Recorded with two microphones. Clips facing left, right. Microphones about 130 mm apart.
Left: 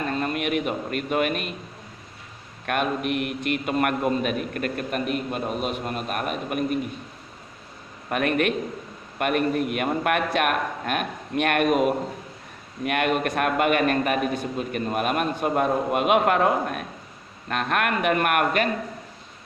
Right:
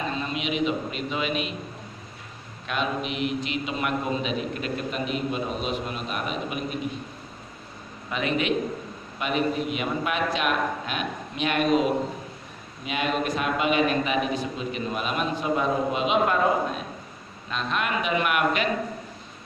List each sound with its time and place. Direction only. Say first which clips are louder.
0.0 s a man's voice: left 3 dB; 55° left (ahead or behind)
2.6 s a man's voice: left 3 dB; 55° left (ahead or behind)
8.1 s a man's voice: left 2 dB; 55° left (ahead or behind)